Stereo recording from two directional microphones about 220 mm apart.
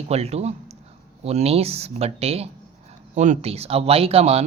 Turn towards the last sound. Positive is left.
turn(degrees=-30)  # may be behind; listen again after turning